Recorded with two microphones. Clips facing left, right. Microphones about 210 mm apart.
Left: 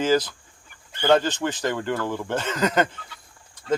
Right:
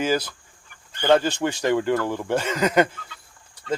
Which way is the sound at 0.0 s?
10° right (ahead or behind).